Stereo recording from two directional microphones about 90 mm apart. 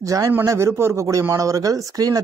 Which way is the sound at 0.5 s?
30° right (ahead or behind).